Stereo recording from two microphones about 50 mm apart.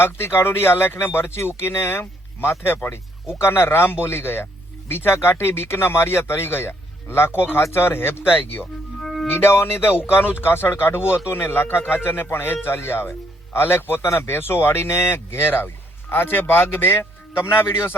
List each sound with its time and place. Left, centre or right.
0.0 s speech: left
9.0 s music: centre
9.3 s speech: left